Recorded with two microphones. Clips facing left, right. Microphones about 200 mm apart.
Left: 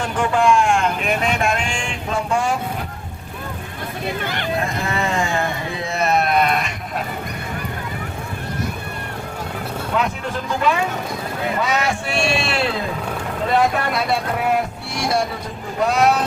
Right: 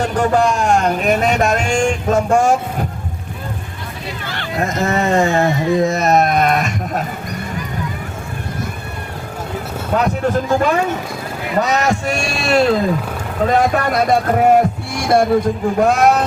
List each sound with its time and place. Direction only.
0.0 s speech: 40° right (ahead or behind)
4.6 s speech: 45° right (ahead or behind)
9.9 s a man's voice: 45° right (ahead or behind)